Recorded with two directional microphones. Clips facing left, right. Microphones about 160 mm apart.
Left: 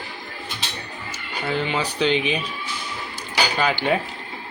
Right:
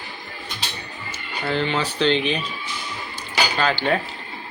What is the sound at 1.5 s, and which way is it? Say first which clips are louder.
Speech: right 1 dB; 10° left (ahead or behind).